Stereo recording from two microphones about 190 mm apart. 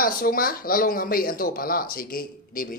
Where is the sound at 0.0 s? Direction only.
50° left (ahead or behind).